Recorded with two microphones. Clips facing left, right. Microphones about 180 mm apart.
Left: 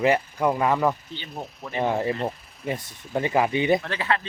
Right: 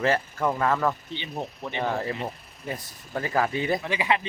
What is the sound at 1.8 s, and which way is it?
Speech, 20° left (ahead or behind).